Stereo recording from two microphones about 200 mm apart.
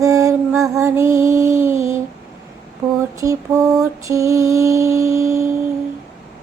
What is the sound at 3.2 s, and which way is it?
Mantra, 15° right (ahead or behind).